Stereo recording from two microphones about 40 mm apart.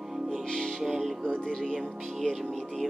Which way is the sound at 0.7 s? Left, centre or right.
Centre.